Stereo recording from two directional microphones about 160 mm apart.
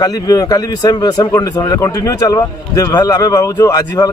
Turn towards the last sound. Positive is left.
turn(degrees=25)  # may be behind; listen again after turning